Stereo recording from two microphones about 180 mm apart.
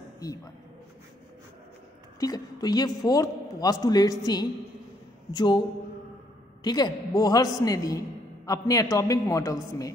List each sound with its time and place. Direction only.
2.1 s a man's voice: 20° left (ahead or behind)
6.6 s a man's voice: 20° left (ahead or behind)